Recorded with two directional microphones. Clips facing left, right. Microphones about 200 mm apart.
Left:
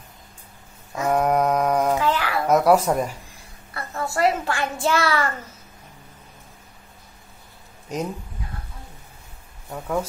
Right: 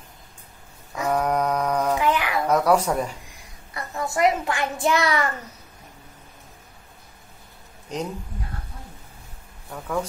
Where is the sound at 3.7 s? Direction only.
15° right (ahead or behind).